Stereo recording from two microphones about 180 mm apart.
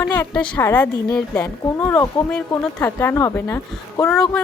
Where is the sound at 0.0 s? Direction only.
5° left (ahead or behind).